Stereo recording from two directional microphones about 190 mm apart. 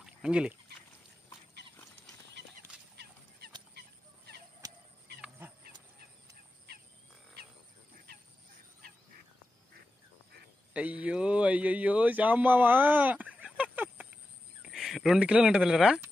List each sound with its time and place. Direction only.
0.0 s duck: 5° right (ahead or behind)
3.0 s fowl: 55° right (ahead or behind)
10.7 s speech: 5° right (ahead or behind)